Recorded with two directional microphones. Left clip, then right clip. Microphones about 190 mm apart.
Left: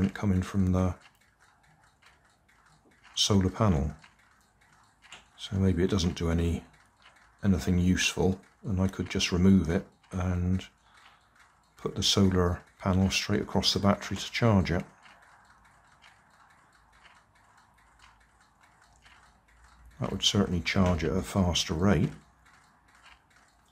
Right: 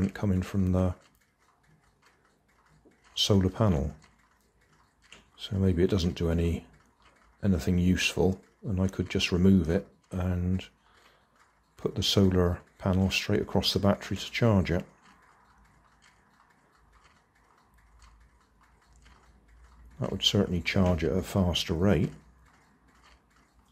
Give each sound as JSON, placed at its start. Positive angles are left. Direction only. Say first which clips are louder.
{"t": 0.3, "sound": "speech", "louder": "even", "side_deg": -10}
{"t": 3.2, "sound": "speech", "louder": "right 1 dB", "side_deg": -15}
{"t": 5.3, "sound": "speech", "louder": "right 1 dB", "side_deg": -15}
{"t": 11.7, "sound": "speech", "louder": "even", "side_deg": -15}
{"t": 20.2, "sound": "speech", "louder": "right 1 dB", "side_deg": -15}